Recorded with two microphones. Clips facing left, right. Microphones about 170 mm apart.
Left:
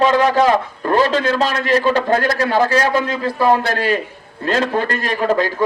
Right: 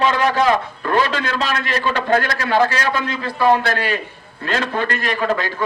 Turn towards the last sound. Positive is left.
turn(degrees=40)  # may be behind; listen again after turning